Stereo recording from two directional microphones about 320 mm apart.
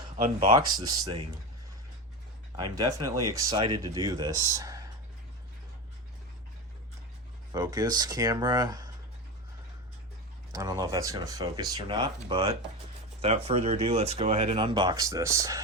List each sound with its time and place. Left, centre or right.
0.3 s speech: centre
2.6 s speech: centre
7.5 s speech: centre
10.5 s speech: centre